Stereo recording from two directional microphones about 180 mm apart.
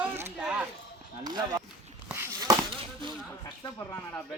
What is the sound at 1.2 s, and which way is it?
Speech, 20° right (ahead or behind).